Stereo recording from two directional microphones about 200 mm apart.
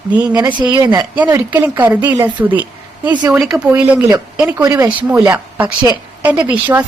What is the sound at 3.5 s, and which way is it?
A woman's voice, 15° right (ahead or behind).